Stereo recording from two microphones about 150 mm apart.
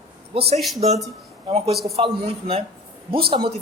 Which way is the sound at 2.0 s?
40° right (ahead or behind).